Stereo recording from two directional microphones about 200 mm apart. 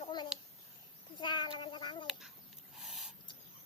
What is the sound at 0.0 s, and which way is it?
Babbling, 20° left (ahead or behind).